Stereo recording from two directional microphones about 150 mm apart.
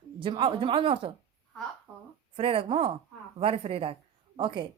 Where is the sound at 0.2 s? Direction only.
35° right (ahead or behind).